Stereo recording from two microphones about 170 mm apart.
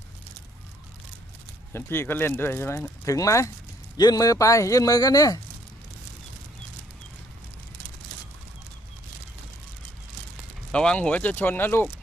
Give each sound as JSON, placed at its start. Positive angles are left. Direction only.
{"t": 1.7, "sound": "a man's voice", "side_deg": 15}
{"t": 10.7, "sound": "speech", "side_deg": 5}